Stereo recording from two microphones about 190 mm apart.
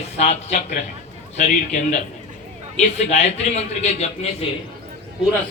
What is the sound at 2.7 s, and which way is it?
A man's voice, 35° left (ahead or behind).